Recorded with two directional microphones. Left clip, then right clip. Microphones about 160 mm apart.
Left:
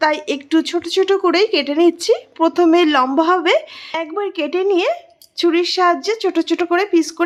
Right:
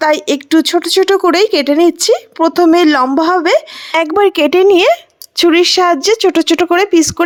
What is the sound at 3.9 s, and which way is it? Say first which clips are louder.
A woman's voice: right 11 dB; 90° right.